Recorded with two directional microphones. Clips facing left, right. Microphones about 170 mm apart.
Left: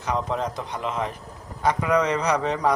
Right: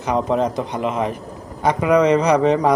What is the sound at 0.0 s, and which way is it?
A man's voice, 20° right (ahead or behind).